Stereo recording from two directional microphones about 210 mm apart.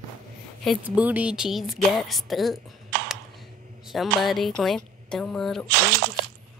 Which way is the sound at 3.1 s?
Centre (ahead or behind).